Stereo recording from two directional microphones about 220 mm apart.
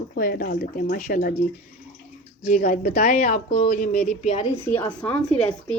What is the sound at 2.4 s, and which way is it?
Speech, 35° left (ahead or behind).